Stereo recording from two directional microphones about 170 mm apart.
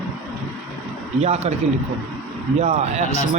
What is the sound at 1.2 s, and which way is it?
Speech, 40° right (ahead or behind).